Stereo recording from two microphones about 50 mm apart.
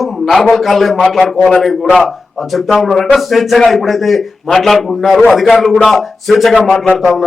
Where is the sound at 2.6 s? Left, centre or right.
Centre.